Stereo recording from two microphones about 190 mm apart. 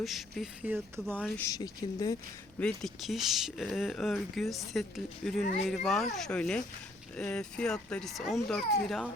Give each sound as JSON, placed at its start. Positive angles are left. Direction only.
{"t": 0.0, "sound": "speech", "side_deg": 0}
{"t": 1.2, "sound": "speech", "side_deg": 15}
{"t": 2.6, "sound": "speech", "side_deg": 5}
{"t": 5.4, "sound": "speech", "side_deg": 40}
{"t": 5.6, "sound": "speech", "side_deg": 0}